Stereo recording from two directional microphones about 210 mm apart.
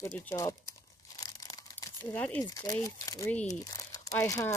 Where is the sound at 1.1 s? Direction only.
15° left (ahead or behind).